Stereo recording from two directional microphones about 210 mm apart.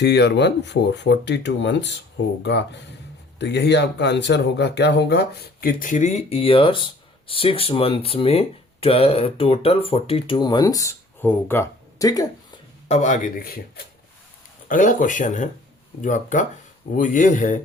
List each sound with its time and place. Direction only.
0.0 s speech: 55° left (ahead or behind); by 12.3 s 15° left (ahead or behind)
12.9 s speech: 35° left (ahead or behind)